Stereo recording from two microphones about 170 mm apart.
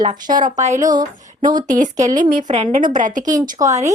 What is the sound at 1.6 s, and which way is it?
Speech, 50° right (ahead or behind).